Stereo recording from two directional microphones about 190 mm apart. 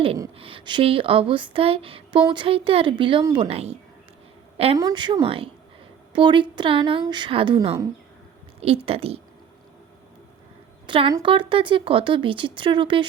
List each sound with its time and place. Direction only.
0.3 s a woman's voice: 30° right (ahead or behind)
10.8 s speech: 25° right (ahead or behind)